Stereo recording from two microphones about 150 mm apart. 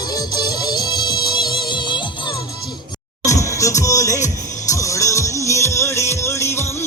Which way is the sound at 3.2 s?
20° left (ahead or behind).